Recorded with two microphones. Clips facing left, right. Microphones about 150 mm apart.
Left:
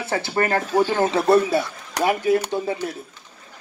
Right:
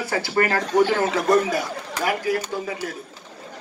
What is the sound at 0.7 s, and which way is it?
Speech, 10° left (ahead or behind).